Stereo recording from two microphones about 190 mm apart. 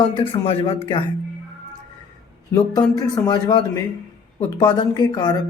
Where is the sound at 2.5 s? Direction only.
20° left (ahead or behind).